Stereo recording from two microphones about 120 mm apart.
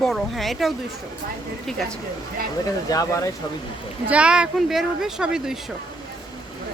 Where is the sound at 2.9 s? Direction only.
30° left (ahead or behind).